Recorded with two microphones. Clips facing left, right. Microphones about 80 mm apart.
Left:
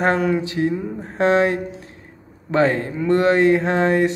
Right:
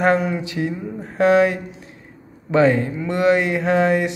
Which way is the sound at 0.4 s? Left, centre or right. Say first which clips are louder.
Left 3 dB; left.